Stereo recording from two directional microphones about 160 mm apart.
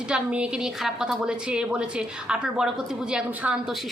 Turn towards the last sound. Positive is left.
turn(degrees=0)  # may be behind; listen again after turning